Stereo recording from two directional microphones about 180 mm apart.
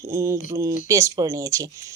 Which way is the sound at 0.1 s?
15° right (ahead or behind).